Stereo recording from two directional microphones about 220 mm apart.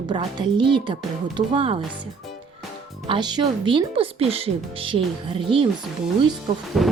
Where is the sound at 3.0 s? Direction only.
20° right (ahead or behind).